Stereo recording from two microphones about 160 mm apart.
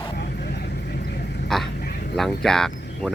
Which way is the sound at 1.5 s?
5° left (ahead or behind).